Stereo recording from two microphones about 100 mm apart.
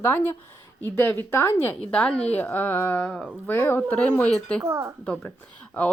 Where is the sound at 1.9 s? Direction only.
10° left (ahead or behind).